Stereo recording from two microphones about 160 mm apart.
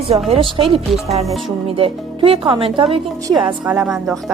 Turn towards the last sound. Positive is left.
turn(degrees=-5)  # may be behind; listen again after turning